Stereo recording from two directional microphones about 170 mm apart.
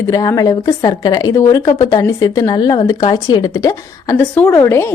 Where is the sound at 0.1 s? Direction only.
20° left (ahead or behind).